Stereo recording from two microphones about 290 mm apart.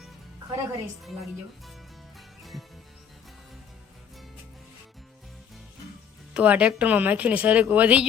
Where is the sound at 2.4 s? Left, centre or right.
Centre.